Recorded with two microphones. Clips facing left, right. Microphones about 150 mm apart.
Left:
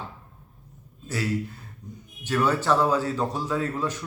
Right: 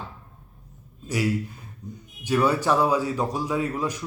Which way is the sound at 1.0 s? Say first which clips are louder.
Right 3 dB; 15° right (ahead or behind).